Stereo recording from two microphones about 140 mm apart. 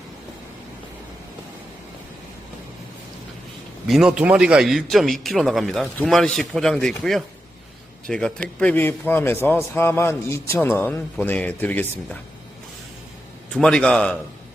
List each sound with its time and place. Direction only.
3.8 s a man's voice: centre (ahead or behind)
13.5 s a man's voice: 5° left (ahead or behind)